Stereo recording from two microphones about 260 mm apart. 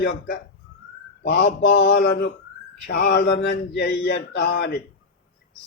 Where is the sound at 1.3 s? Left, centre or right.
Left.